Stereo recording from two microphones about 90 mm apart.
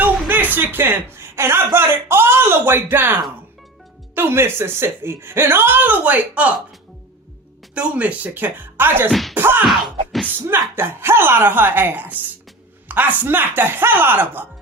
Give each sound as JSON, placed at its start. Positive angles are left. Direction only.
{"t": 0.0, "sound": "a sound", "side_deg": -20}
{"t": 0.5, "sound": "speech", "side_deg": -20}
{"t": 7.8, "sound": "speech", "side_deg": -15}
{"t": 9.3, "sound": "a sound", "side_deg": -20}
{"t": 9.6, "sound": "music", "side_deg": 0}
{"t": 10.8, "sound": "speech", "side_deg": -25}